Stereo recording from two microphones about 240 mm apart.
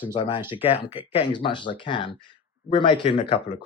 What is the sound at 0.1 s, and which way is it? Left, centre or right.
Speech, left.